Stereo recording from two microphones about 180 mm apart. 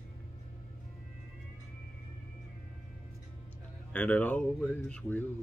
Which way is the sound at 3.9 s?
10° left (ahead or behind).